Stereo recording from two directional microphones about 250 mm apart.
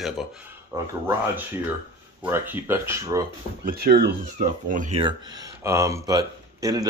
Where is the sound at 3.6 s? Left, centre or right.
Right.